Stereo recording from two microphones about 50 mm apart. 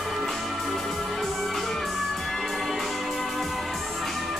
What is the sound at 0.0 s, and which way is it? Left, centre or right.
Music, centre.